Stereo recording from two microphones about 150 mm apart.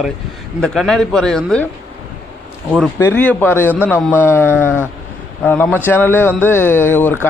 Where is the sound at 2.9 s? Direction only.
15° left (ahead or behind).